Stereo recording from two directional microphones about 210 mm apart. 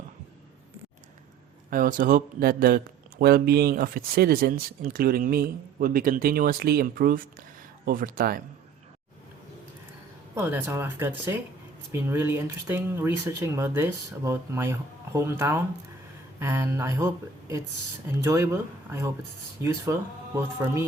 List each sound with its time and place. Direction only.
1.7 s a man's voice: 40° right (ahead or behind)
10.3 s speech: 10° right (ahead or behind)
18.2 s speech: 15° right (ahead or behind)